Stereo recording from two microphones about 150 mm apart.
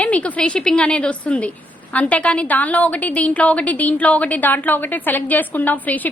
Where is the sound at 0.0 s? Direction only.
10° left (ahead or behind).